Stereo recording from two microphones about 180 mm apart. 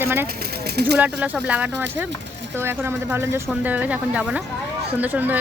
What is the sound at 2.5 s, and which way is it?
A woman's voice, 15° right (ahead or behind).